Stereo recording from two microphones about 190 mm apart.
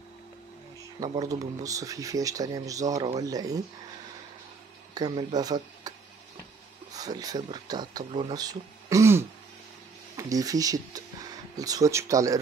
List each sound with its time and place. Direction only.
0.9 s speech: 20° right (ahead or behind)
4.9 s speech: 20° right (ahead or behind)